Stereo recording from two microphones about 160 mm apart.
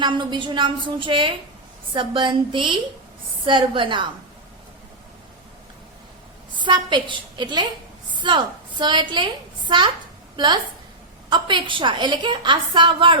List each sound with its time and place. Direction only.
0.0 s a woman's voice: 30° right (ahead or behind)
6.6 s a woman's voice: 30° right (ahead or behind)